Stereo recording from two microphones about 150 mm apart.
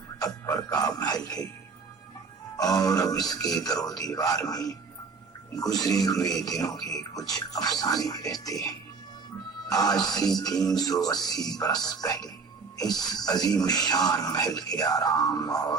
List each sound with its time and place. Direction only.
0.2 s music: 25° left (ahead or behind)
2.6 s speech: 25° left (ahead or behind)